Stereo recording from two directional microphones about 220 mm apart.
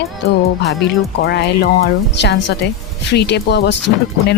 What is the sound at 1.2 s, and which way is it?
Speech, 50° left (ahead or behind).